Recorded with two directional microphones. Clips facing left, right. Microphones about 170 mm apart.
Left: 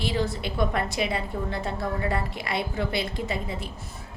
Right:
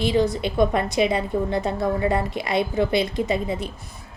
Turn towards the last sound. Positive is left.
turn(degrees=-20)  # may be behind; listen again after turning